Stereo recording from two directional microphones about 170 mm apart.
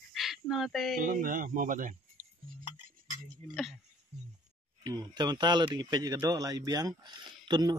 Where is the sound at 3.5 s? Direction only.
Centre (ahead or behind).